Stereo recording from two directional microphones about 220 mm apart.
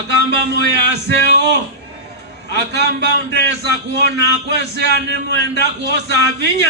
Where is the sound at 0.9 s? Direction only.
50° right (ahead or behind).